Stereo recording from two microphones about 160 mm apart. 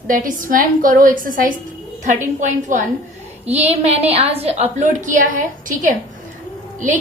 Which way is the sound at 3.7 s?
40° right (ahead or behind).